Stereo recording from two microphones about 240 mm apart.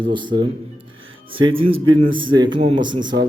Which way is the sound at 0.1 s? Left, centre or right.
Centre.